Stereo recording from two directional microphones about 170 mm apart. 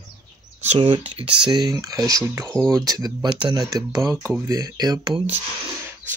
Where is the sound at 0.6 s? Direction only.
40° right (ahead or behind).